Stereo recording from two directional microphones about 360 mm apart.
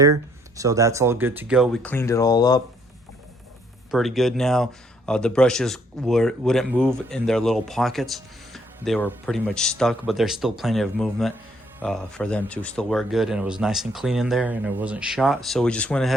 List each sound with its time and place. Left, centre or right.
0.0 s speech: centre
3.9 s speech: centre